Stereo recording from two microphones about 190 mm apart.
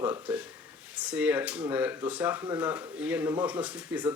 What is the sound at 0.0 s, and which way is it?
Speech, 10° right (ahead or behind).